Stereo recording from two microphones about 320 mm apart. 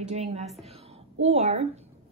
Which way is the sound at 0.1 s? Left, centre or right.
Centre.